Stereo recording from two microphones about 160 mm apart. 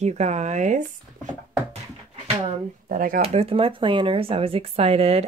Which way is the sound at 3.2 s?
40° right (ahead or behind).